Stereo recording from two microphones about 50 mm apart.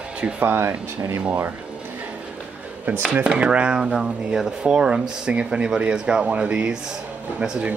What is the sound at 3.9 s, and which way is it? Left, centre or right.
Speech, centre.